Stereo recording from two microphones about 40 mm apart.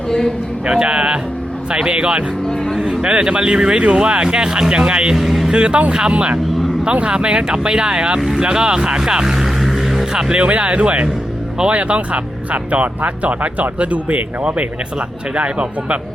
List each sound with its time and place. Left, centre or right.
0.6 s speech: right
5.1 s speech: centre
5.5 s speech: right
9.6 s vehicle: centre
10.1 s speech: centre
10.8 s speech: right